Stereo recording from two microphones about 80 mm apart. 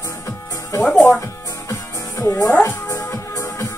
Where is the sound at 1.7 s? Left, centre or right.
Left.